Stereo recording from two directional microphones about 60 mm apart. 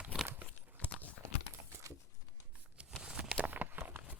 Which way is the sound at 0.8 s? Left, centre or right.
Left.